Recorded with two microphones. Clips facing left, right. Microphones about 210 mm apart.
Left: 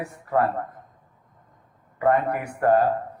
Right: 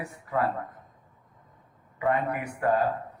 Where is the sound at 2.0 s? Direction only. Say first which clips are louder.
Left 5 dB; 50° left (ahead or behind).